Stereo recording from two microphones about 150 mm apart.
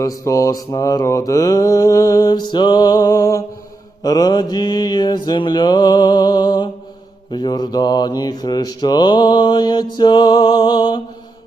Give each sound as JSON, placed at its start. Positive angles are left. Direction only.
{"t": 0.0, "sound": "mantra", "side_deg": 20}